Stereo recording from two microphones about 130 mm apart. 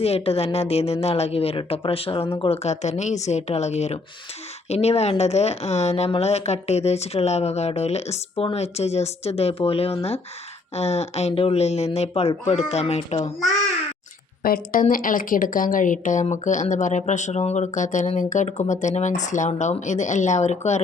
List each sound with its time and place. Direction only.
0.0 s speech: 50° left (ahead or behind)
14.5 s a woman's voice: 90° left
16.2 s speech: 70° left (ahead or behind)